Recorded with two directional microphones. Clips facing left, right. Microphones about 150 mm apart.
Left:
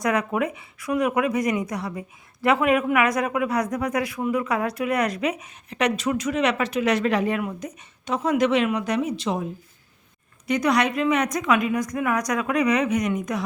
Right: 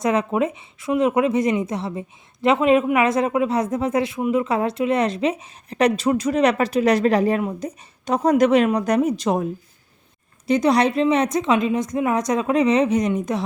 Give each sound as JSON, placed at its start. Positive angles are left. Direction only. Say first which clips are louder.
{"t": 0.0, "sound": "speech", "louder": "right 3 dB", "side_deg": -25}
{"t": 10.4, "sound": "speech", "louder": "right 4 dB", "side_deg": -30}